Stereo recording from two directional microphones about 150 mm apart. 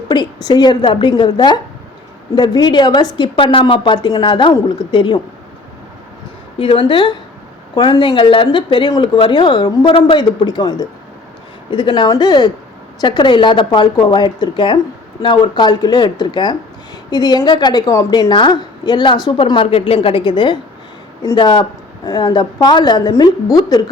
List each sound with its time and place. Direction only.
0.1 s a woman's voice: 30° left (ahead or behind)
6.6 s a woman's voice: 35° left (ahead or behind)